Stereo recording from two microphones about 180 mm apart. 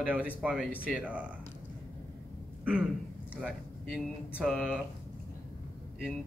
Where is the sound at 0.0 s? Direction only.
10° right (ahead or behind).